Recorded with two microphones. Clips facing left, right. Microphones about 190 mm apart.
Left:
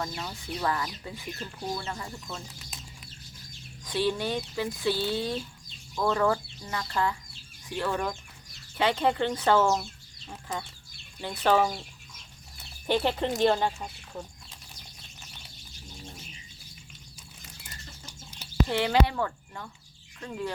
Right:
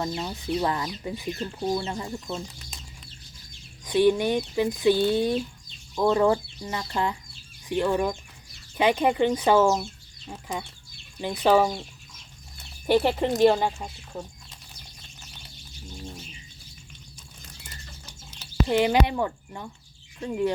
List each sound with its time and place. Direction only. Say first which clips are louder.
0.0 s speech: right 5 dB; 20° right (ahead or behind)
3.8 s speech: right 8 dB; 15° right (ahead or behind)
12.9 s speech: right 5 dB; 10° right (ahead or behind)
18.7 s speech: right 5 dB; 15° right (ahead or behind)